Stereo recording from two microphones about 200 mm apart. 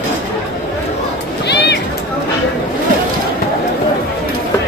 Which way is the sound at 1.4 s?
60° left (ahead or behind).